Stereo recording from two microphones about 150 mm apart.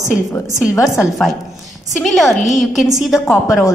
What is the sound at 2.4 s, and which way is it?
Speech, centre (ahead or behind).